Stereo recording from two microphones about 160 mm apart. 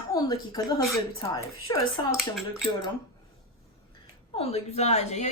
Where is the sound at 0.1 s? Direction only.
25° left (ahead or behind).